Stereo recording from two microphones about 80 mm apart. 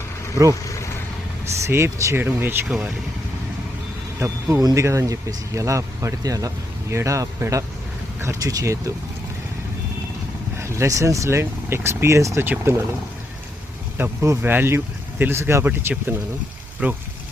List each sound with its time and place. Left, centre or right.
1.6 s speech: right
2.1 s speech: right
2.6 s speech: centre
4.2 s speech: right
10.6 s speech: right
14.0 s speech: right